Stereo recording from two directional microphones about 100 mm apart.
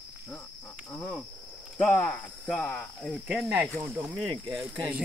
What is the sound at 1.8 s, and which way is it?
Speech, 15° left (ahead or behind).